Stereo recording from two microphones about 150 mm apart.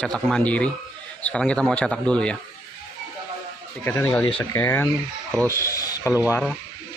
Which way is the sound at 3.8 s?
15° left (ahead or behind).